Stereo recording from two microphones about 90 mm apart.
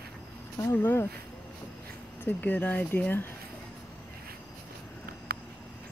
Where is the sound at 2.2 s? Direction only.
20° left (ahead or behind).